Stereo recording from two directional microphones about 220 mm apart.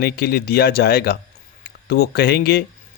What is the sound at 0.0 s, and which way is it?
A man's voice, 45° left (ahead or behind).